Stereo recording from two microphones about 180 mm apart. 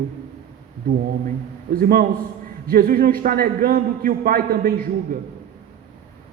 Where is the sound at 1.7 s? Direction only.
55° right (ahead or behind).